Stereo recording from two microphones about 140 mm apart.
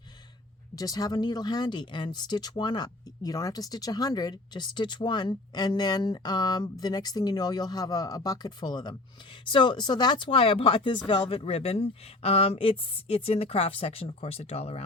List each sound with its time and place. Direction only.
0.8 s speech: 25° left (ahead or behind); by 14.8 s 45° left (ahead or behind)